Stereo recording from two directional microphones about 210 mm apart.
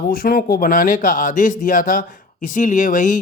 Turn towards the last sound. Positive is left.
turn(degrees=40)  # may be behind; listen again after turning